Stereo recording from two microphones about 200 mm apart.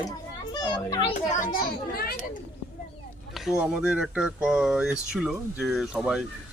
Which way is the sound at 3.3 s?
5° right (ahead or behind).